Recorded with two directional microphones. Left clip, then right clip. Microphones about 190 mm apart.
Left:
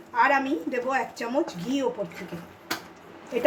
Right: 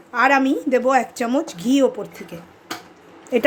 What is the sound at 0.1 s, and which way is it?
A woman's voice, 65° right (ahead or behind).